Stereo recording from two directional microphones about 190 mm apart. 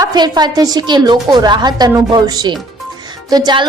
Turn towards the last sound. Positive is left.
turn(degrees=-25)  # may be behind; listen again after turning